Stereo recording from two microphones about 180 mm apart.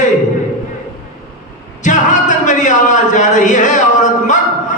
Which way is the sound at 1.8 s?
45° left (ahead or behind).